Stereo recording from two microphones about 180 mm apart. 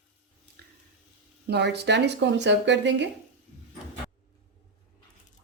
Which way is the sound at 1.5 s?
70° right (ahead or behind).